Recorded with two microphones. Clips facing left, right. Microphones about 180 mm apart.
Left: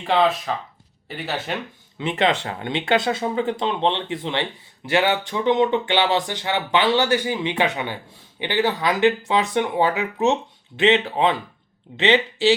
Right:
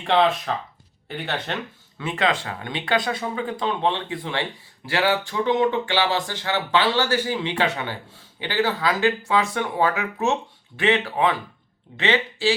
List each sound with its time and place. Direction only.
0.0 s speech: centre (ahead or behind)
2.0 s speech: 20° left (ahead or behind)